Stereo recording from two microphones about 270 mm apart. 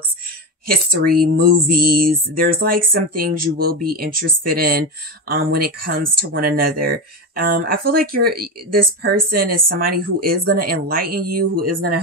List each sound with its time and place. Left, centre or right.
0.7 s speech: right